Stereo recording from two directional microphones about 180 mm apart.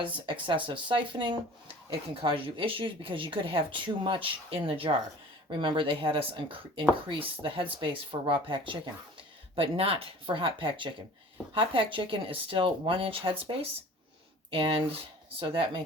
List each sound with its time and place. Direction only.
0.0 s speech: 25° right (ahead or behind)
14.5 s speech: 30° right (ahead or behind)